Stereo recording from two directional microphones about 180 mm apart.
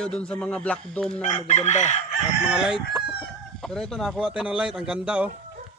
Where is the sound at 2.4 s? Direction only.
5° right (ahead or behind).